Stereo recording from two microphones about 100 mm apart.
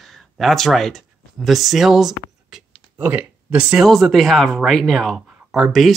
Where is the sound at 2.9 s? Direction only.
15° right (ahead or behind).